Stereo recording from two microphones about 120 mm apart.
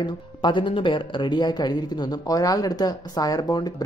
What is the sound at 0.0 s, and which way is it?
Speech, 40° left (ahead or behind).